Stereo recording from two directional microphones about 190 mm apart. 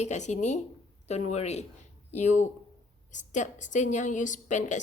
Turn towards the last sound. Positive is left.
turn(degrees=40)  # may be behind; listen again after turning